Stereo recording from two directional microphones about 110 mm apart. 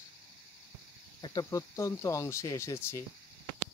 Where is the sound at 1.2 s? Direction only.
40° left (ahead or behind); by 3.0 s 25° left (ahead or behind).